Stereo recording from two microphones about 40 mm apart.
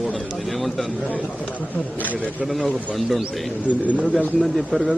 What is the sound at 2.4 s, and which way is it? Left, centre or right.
Speech, centre.